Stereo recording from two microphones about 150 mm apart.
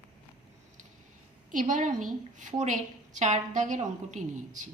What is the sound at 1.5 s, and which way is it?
A woman's voice, 60° right (ahead or behind).